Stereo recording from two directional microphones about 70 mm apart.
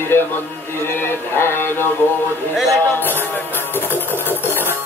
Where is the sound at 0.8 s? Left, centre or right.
Left.